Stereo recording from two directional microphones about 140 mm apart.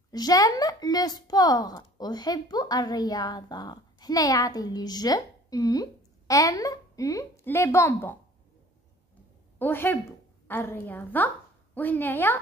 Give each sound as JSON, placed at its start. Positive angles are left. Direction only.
{"t": 0.1, "sound": "speech", "side_deg": 25}
{"t": 9.6, "sound": "a woman's voice", "side_deg": 15}